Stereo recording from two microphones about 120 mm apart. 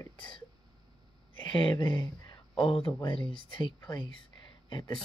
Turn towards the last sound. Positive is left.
turn(degrees=40)  # may be behind; listen again after turning